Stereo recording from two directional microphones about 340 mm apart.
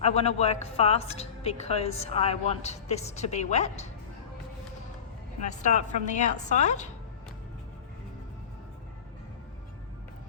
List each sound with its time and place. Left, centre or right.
0.0 s a woman's voice: centre
5.4 s a woman's voice: left